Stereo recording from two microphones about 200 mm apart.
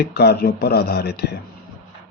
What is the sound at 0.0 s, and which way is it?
Speech, 55° left (ahead or behind).